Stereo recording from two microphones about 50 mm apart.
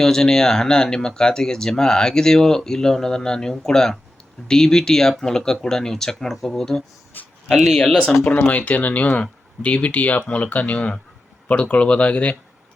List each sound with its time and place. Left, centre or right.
0.0 s speech: centre
7.1 s a sound: left
7.5 s speech: centre
8.2 s speech: left